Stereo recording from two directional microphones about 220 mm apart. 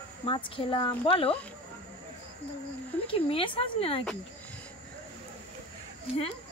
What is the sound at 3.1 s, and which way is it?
Speech, 25° left (ahead or behind).